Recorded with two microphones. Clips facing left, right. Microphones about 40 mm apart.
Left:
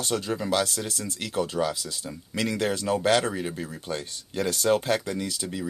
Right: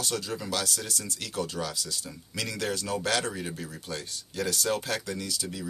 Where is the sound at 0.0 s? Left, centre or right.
Left.